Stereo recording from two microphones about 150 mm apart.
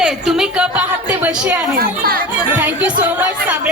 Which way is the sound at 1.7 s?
90° right.